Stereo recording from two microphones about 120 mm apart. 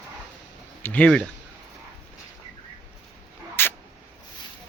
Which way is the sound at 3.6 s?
20° left (ahead or behind).